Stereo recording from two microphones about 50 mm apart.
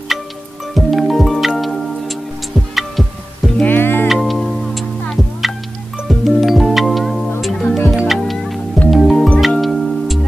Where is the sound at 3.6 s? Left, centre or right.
Left.